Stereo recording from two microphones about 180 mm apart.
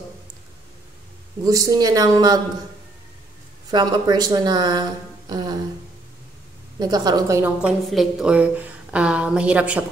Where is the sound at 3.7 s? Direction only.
20° right (ahead or behind).